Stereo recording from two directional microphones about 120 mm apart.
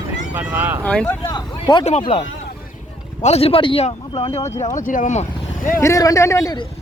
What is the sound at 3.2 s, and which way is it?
Speech, 60° left (ahead or behind).